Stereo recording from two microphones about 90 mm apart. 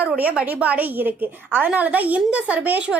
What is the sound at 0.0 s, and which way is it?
A woman's voice, 15° right (ahead or behind).